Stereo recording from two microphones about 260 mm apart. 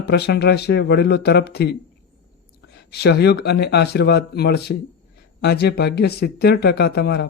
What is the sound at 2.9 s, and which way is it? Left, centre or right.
Speech, left.